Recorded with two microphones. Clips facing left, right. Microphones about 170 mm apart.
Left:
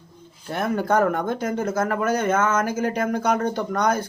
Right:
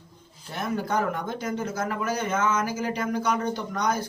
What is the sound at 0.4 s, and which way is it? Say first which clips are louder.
Speech: left 6 dB; 55° left (ahead or behind).